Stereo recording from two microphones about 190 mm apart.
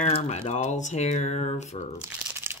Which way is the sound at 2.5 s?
10° right (ahead or behind).